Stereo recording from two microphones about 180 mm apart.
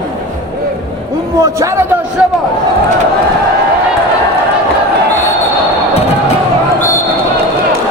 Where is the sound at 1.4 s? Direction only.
15° right (ahead or behind).